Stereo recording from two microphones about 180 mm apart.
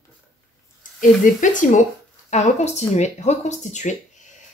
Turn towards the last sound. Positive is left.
turn(degrees=40)  # may be behind; listen again after turning